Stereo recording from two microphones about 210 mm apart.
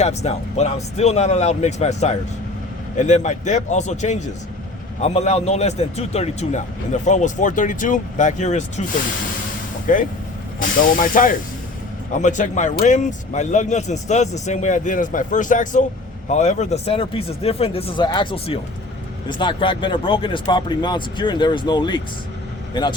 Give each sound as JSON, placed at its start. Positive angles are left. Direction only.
{"t": 0.0, "sound": "a man's voice", "side_deg": 30}